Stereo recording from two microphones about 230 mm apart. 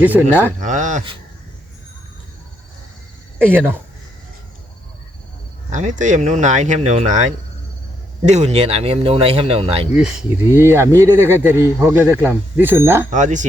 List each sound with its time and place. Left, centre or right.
0.0 s speech: centre
0.6 s speech: right
3.4 s speech: centre
5.7 s speech: right
9.9 s speech: centre
13.1 s speech: right